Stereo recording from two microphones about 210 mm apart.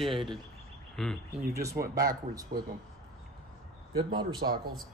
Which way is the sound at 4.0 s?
20° right (ahead or behind).